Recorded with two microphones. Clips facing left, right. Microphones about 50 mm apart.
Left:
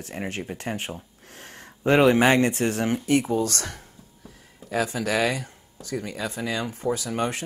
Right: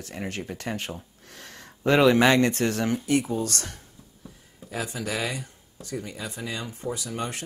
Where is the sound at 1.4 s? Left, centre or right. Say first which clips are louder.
Left 1 dB; left.